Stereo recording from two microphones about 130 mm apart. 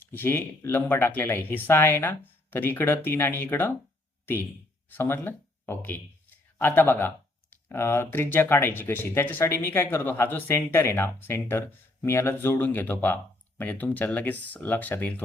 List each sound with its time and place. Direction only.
0.0 s speech: 15° left (ahead or behind)
4.9 s speech: 15° left (ahead or behind)